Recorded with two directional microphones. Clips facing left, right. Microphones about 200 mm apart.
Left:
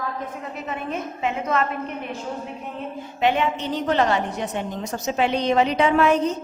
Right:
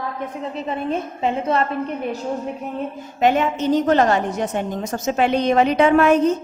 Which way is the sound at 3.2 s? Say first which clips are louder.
Right 4 dB; 45° right (ahead or behind).